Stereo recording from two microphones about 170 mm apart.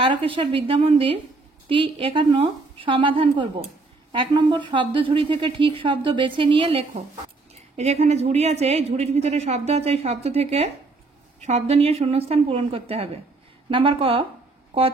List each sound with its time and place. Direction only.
0.0 s a woman's voice: 30° right (ahead or behind)